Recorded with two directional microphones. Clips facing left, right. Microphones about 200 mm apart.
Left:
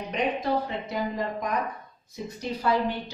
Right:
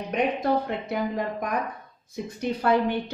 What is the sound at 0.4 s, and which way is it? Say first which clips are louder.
Speech: right 3 dB; 60° right (ahead or behind).